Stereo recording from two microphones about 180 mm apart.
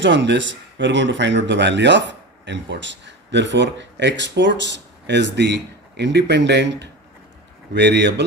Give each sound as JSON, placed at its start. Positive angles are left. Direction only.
{"t": 0.0, "sound": "speech", "side_deg": -85}